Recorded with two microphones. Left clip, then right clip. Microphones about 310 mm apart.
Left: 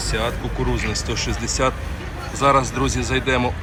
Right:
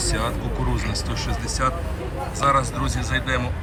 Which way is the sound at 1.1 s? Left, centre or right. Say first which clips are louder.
Left 4 dB; centre.